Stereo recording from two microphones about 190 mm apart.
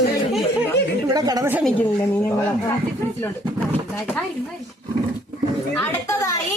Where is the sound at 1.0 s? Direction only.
20° right (ahead or behind).